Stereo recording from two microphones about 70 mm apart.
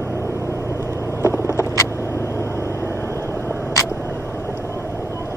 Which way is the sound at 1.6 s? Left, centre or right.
Left.